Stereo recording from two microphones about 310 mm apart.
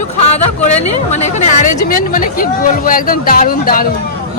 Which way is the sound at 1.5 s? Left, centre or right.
Left.